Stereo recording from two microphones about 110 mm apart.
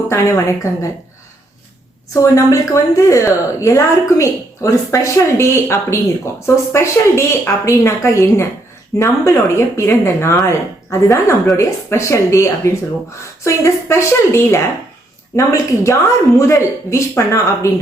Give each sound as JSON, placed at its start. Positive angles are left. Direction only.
{"t": 0.1, "sound": "a woman's voice", "side_deg": 25}
{"t": 2.2, "sound": "a woman's voice", "side_deg": 30}